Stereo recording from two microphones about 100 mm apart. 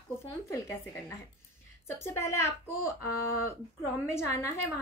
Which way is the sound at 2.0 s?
30° left (ahead or behind).